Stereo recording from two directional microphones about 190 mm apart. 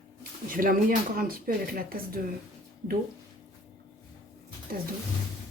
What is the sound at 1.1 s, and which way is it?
Speech, 50° right (ahead or behind).